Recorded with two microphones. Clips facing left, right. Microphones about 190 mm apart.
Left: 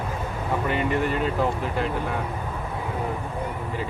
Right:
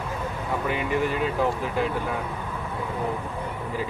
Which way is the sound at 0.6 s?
5° right (ahead or behind).